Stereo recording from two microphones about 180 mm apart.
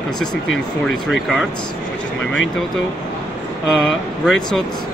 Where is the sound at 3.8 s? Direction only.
5° left (ahead or behind).